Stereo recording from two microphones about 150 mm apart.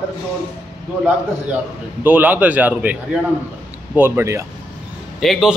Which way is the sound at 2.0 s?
10° right (ahead or behind).